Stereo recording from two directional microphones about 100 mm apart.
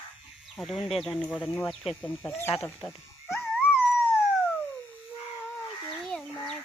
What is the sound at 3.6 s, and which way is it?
Dog, 10° right (ahead or behind).